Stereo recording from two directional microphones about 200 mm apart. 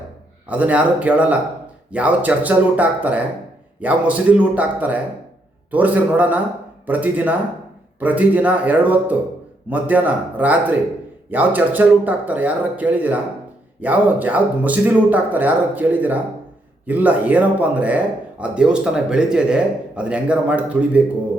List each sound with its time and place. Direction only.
0.4 s a man's voice: 5° right (ahead or behind)